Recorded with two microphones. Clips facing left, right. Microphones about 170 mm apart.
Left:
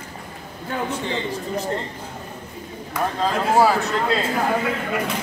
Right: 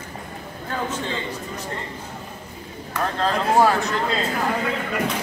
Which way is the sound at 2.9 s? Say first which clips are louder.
Even; 10° left (ahead or behind).